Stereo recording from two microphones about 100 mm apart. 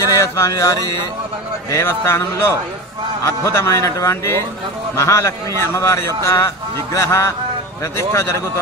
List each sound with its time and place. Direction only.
0.0 s a man's voice: 30° left (ahead or behind)